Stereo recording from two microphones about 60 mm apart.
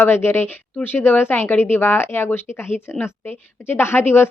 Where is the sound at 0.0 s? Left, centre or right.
Left.